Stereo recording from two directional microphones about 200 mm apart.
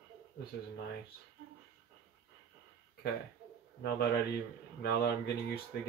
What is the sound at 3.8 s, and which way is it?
Speech, 55° left (ahead or behind).